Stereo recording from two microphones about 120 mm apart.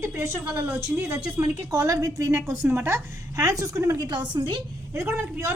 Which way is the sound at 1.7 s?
30° right (ahead or behind).